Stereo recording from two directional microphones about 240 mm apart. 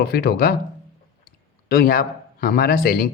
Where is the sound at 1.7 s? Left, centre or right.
Left.